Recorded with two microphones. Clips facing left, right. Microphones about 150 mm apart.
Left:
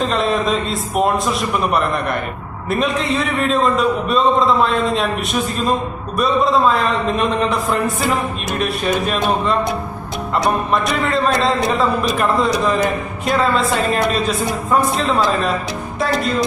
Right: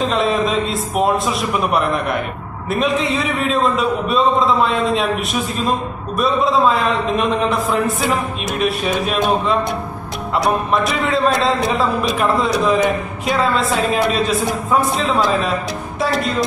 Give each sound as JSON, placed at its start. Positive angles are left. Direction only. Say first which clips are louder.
{"t": 0.0, "sound": "a man's voice", "louder": "right 1 dB", "side_deg": 0}